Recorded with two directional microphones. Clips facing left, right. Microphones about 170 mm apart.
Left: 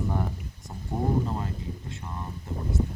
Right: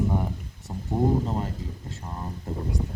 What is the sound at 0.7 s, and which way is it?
Speech, 20° right (ahead or behind).